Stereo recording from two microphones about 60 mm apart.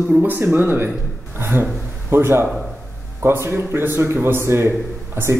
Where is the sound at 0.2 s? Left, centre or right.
Right.